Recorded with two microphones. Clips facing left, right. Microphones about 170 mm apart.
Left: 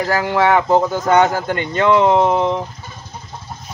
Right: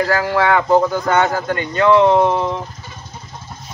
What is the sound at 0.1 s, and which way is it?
Speech, 20° left (ahead or behind).